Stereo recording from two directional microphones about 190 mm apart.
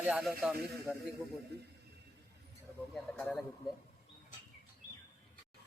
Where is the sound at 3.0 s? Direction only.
5° left (ahead or behind).